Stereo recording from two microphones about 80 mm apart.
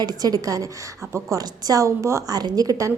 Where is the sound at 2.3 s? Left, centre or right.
Right.